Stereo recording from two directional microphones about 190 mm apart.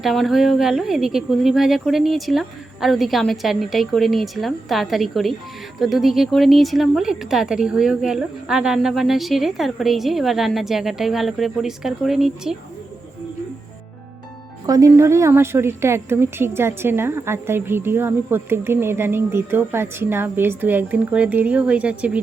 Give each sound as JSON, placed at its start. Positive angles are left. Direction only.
{"t": 0.0, "sound": "speech", "side_deg": 0}
{"t": 14.7, "sound": "a woman's voice", "side_deg": -15}